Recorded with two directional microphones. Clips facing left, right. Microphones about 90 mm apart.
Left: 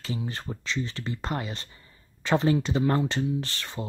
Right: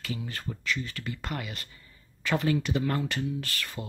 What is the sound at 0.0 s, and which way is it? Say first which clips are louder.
Speech: left 3 dB; 25° left (ahead or behind).